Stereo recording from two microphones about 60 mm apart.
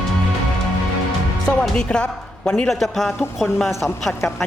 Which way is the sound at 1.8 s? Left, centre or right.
Centre.